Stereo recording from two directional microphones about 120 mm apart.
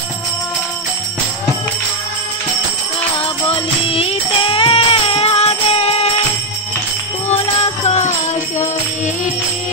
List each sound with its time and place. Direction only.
3.4 s music: 50° left (ahead or behind)
7.3 s music: 60° left (ahead or behind)
8.5 s music: 85° left